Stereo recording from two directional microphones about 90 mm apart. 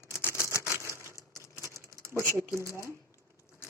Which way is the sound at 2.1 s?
35° right (ahead or behind).